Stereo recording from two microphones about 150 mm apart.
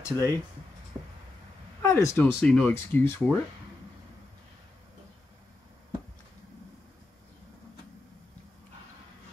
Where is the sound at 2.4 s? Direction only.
5° left (ahead or behind).